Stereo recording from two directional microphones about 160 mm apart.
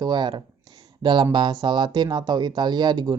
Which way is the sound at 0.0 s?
25° right (ahead or behind).